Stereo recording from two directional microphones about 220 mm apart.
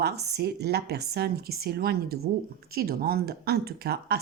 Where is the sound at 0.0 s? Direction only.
50° right (ahead or behind).